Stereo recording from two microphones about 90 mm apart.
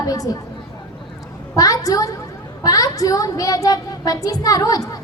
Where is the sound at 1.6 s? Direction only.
40° left (ahead or behind).